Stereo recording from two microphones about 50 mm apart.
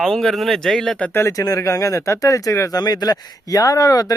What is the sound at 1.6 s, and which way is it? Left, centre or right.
Speech, left.